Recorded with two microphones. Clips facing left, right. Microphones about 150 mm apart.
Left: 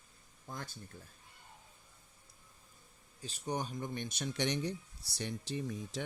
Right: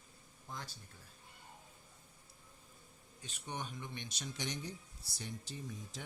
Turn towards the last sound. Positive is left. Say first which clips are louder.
# left 8 dB
turn(degrees=75)  # may be behind; listen again after turning